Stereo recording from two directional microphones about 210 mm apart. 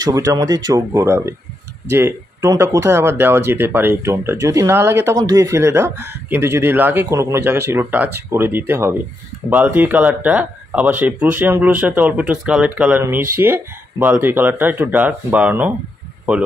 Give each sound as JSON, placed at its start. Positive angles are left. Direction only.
{"t": 0.0, "sound": "speech", "side_deg": -15}